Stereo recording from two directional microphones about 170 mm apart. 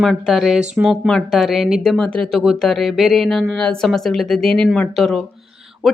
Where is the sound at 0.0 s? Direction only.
Centre (ahead or behind).